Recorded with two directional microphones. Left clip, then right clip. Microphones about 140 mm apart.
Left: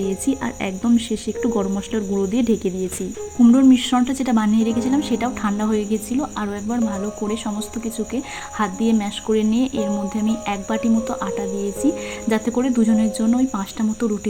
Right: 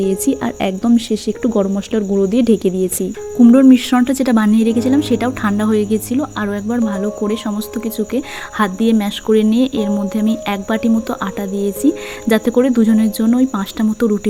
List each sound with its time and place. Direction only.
0.0 s a woman's voice: 35° right (ahead or behind)